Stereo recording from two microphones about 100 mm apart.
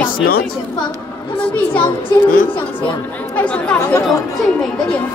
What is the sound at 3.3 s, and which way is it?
Speech, 15° left (ahead or behind).